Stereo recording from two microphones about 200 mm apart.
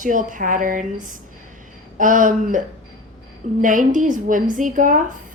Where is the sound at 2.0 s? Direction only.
40° right (ahead or behind).